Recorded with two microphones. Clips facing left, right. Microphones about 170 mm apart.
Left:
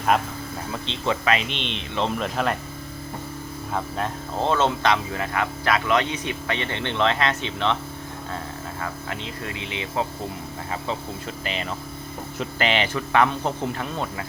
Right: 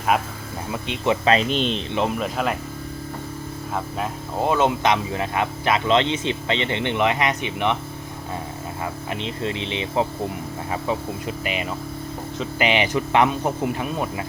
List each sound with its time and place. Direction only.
0.1 s speech: 5° right (ahead or behind)
1.3 s speech: 40° right (ahead or behind)
2.0 s speech: 5° right (ahead or behind)
3.8 s speech: 5° right (ahead or behind)
8.8 s speech: 20° right (ahead or behind)